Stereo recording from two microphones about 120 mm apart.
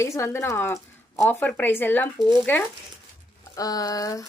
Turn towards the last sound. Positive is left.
turn(degrees=30)  # may be behind; listen again after turning